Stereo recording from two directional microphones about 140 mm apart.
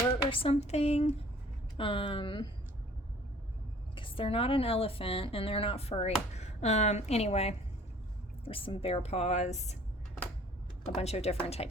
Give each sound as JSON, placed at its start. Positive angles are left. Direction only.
{"t": 0.1, "sound": "speech", "side_deg": 40}
{"t": 1.8, "sound": "speech", "side_deg": 40}
{"t": 3.9, "sound": "a woman's voice", "side_deg": 40}
{"t": 10.9, "sound": "a woman's voice", "side_deg": 50}